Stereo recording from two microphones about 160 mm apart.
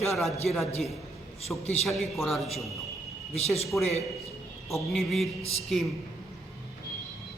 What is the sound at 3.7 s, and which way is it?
Speech, centre (ahead or behind).